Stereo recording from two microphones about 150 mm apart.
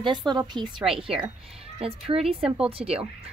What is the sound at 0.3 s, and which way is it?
A woman's voice, 30° right (ahead or behind).